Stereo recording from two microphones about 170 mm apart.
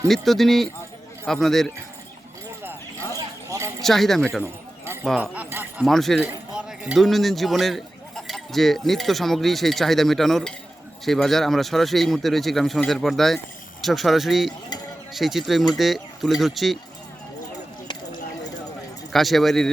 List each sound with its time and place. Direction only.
0.1 s speech: centre (ahead or behind)
3.2 s clip-clop: 20° right (ahead or behind)
3.8 s speech: centre (ahead or behind)
5.2 s speech: 10° right (ahead or behind)
5.8 s speech: centre (ahead or behind)
19.1 s speech: centre (ahead or behind)